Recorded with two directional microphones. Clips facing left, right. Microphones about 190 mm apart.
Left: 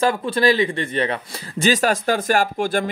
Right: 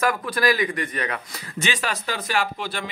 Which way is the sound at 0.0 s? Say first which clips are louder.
Left 4 dB; 25° left (ahead or behind).